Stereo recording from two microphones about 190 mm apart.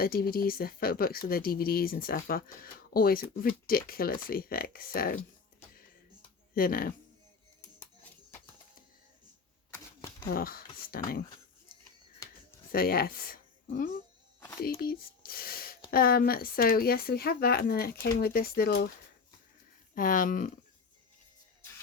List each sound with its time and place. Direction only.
0.0 s speech: 50° left (ahead or behind)
6.5 s speech: 50° left (ahead or behind)
9.7 s camera: 15° left (ahead or behind)
10.2 s speech: 50° left (ahead or behind)
12.7 s speech: 50° left (ahead or behind)
20.0 s speech: 45° left (ahead or behind)